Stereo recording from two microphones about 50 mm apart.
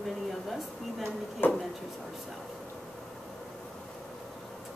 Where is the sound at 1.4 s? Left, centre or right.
Left.